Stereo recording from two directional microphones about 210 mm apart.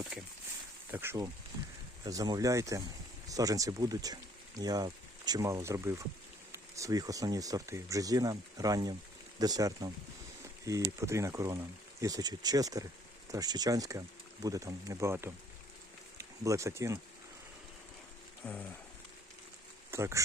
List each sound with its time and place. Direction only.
0.1 s speech: 5° right (ahead or behind)
18.4 s a sound: 10° left (ahead or behind)
19.9 s speech: 15° right (ahead or behind)